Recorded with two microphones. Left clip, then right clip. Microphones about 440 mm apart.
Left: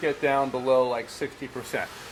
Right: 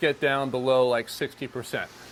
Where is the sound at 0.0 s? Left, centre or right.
Right.